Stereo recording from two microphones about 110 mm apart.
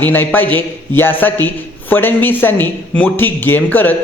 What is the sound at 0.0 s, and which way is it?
A man's voice, 20° left (ahead or behind).